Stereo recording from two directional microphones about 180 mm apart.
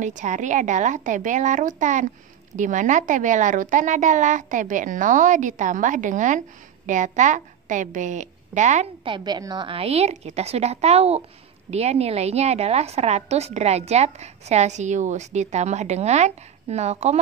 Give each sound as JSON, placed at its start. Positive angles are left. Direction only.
{"t": 0.0, "sound": "a woman's voice", "side_deg": -40}
{"t": 9.0, "sound": "a woman's voice", "side_deg": -25}